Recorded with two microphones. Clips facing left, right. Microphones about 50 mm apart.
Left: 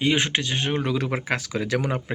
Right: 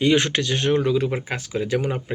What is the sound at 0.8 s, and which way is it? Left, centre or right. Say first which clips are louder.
Speech: right 4 dB; left.